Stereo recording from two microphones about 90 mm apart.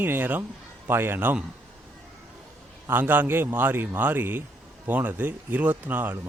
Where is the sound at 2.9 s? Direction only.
20° right (ahead or behind).